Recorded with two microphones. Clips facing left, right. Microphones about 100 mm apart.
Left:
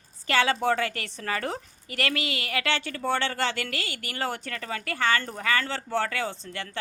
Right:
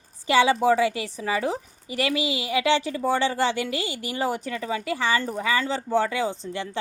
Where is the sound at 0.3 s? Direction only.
15° right (ahead or behind).